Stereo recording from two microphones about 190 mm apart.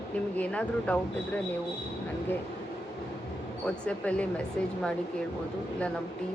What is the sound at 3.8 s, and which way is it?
Speech, 5° left (ahead or behind).